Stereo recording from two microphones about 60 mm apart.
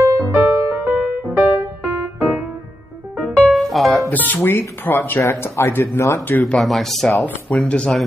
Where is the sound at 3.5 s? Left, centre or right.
Centre.